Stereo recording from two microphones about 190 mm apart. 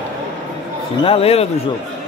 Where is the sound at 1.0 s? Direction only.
30° left (ahead or behind).